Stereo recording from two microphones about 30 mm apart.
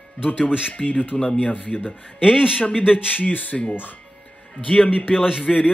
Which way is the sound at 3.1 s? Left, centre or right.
Left.